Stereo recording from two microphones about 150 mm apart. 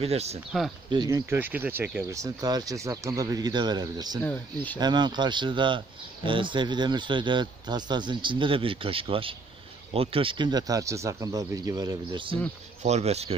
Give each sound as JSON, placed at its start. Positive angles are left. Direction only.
{"t": 0.0, "sound": "speech", "side_deg": -45}
{"t": 0.8, "sound": "speech", "side_deg": -25}
{"t": 1.3, "sound": "speech", "side_deg": -15}
{"t": 4.2, "sound": "speech", "side_deg": 10}
{"t": 4.7, "sound": "speech", "side_deg": -30}
{"t": 12.8, "sound": "speech", "side_deg": -45}